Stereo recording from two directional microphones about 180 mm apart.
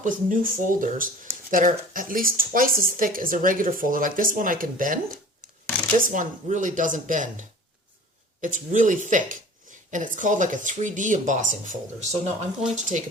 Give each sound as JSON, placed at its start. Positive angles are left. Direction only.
{"t": 0.0, "sound": "speech", "side_deg": -45}
{"t": 6.0, "sound": "speech", "side_deg": -45}